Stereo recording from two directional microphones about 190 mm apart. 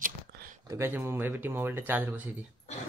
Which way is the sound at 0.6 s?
15° right (ahead or behind).